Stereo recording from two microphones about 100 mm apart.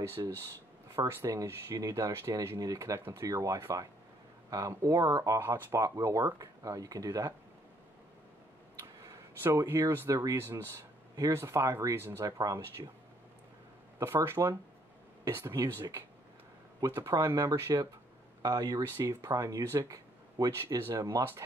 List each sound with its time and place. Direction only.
0.2 s speech: 40° right (ahead or behind)
0.9 s speech: 30° right (ahead or behind)
9.0 s speech: 30° right (ahead or behind)
12.2 s speech: 35° right (ahead or behind)
13.9 s speech: 25° right (ahead or behind)
17.0 s speech: 35° right (ahead or behind)